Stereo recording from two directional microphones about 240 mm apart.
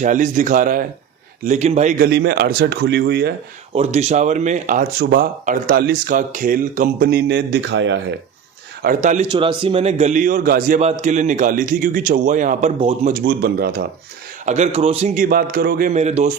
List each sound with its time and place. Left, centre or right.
0.0 s a man's voice: right
3.8 s a man's voice: right
8.8 s a man's voice: right
9.3 s a man's voice: centre; by 13.8 s right
14.4 s a man's voice: right